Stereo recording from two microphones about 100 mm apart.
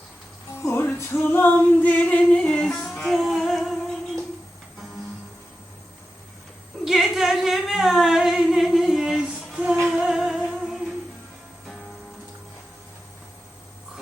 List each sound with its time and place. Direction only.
0.5 s music: 25° left (ahead or behind)
0.9 s female singing: 20° left (ahead or behind); by 4.2 s centre (ahead or behind)
6.8 s singing: 5° right (ahead or behind)
9.9 s music: 5° right (ahead or behind)